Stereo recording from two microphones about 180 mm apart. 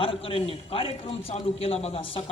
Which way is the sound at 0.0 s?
30° left (ahead or behind).